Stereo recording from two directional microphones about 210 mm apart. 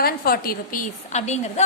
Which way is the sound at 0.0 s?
45° left (ahead or behind).